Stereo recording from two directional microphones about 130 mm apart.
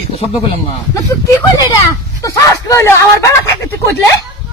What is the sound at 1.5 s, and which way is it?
Speech, 25° left (ahead or behind).